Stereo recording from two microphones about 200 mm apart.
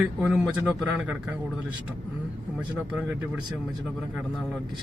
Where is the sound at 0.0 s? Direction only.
10° right (ahead or behind).